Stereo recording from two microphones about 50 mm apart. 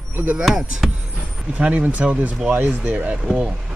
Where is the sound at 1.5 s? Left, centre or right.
Right.